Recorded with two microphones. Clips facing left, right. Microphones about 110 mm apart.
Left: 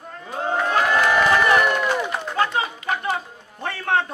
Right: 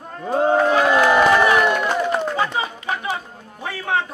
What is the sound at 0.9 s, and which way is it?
Run, 15° right (ahead or behind).